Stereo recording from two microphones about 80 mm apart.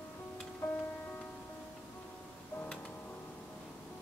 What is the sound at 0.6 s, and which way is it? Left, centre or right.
Music, left.